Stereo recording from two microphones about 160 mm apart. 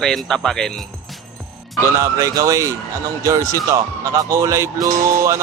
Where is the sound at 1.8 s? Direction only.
20° right (ahead or behind).